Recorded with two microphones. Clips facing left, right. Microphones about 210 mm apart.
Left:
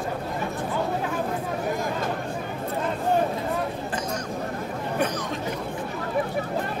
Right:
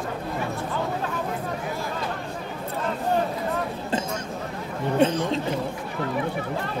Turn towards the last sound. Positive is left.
turn(degrees=-25)  # may be behind; listen again after turning